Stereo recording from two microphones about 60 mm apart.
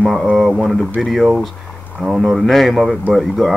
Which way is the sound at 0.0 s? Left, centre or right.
Centre.